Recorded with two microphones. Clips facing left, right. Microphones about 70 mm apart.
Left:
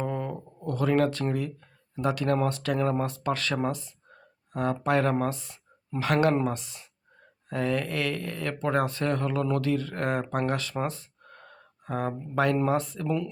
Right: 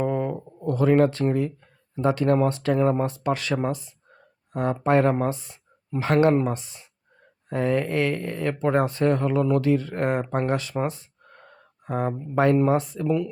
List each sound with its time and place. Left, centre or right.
0.0 s a sound: right
2.0 s speech: right
13.1 s speech: centre